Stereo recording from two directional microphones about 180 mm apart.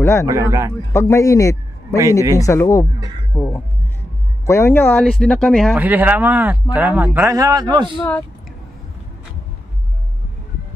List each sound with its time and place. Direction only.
0.0 s speech: 15° left (ahead or behind)
0.3 s speech: 15° right (ahead or behind)
0.9 s a man's voice: 15° left (ahead or behind)
5.8 s a man's voice: 10° right (ahead or behind)